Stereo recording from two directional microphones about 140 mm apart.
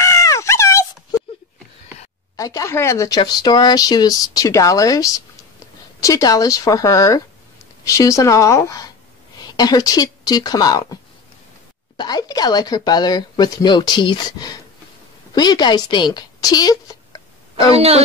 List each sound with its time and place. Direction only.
0.0 s dog: 20° left (ahead or behind)
2.3 s speech: 25° left (ahead or behind)
12.0 s a woman's voice: 30° left (ahead or behind)
17.7 s speech: 45° right (ahead or behind)